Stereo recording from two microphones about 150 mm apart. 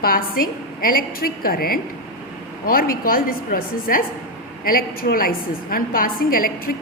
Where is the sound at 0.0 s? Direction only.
75° left (ahead or behind).